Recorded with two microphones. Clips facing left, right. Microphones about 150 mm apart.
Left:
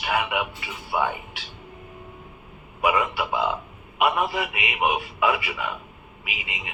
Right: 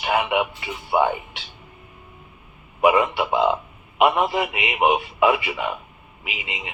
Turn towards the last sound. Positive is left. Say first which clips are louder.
# right 3 dB
turn(degrees=-25)  # may be behind; listen again after turning